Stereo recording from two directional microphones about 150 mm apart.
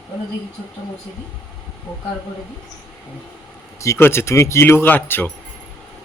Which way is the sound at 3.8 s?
20° left (ahead or behind).